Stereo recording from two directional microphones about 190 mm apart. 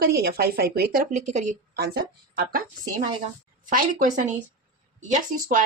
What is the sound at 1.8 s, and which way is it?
A woman's voice, 50° right (ahead or behind).